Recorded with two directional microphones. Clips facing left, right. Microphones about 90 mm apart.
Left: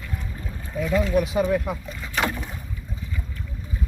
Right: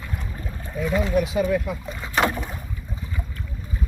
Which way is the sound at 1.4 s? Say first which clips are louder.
Even; 25° left (ahead or behind).